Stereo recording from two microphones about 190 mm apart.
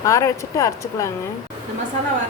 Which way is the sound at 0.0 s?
15° left (ahead or behind).